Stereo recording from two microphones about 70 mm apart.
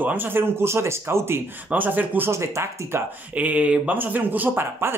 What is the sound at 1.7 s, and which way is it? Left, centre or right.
Speech, right.